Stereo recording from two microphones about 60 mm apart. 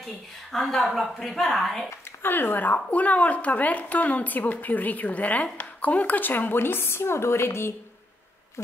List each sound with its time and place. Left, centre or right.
0.0 s a woman's voice: centre
1.9 s speech: left
8.6 s owl: left